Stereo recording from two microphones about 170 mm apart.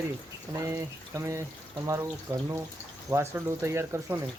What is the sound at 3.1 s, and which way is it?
Speech, 15° right (ahead or behind).